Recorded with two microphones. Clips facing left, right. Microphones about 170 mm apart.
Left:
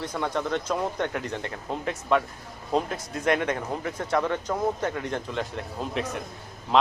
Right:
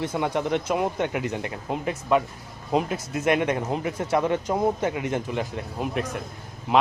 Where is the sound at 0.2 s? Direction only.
15° right (ahead or behind).